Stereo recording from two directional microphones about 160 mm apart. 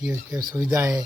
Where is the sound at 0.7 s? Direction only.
20° right (ahead or behind).